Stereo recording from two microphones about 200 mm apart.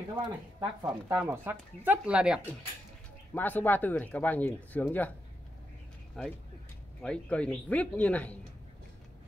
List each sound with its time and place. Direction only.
0.1 s speech: 20° right (ahead or behind)
0.8 s speech: 5° right (ahead or behind)
3.3 s speech: 10° left (ahead or behind)
6.2 s speech: centre (ahead or behind)